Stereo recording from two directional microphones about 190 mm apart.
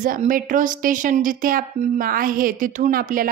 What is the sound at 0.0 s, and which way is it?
Speech, 45° right (ahead or behind).